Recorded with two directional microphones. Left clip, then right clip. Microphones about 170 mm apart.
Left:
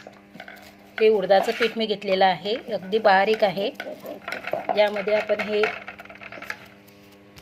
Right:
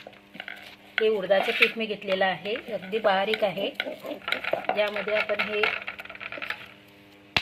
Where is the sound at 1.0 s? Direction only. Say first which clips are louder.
Left 5 dB; 25° left (ahead or behind).